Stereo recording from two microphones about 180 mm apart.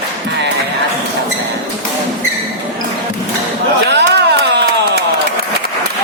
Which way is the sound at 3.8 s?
70° right (ahead or behind).